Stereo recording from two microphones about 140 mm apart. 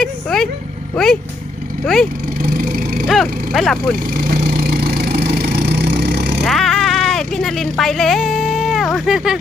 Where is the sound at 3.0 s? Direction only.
Centre (ahead or behind).